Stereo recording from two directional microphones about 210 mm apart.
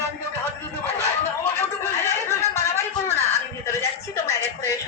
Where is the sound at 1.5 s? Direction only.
15° left (ahead or behind).